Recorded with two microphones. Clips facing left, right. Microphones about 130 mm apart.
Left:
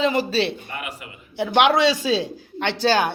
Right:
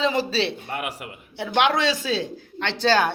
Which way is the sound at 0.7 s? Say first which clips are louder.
Right 3 dB; 65° right (ahead or behind).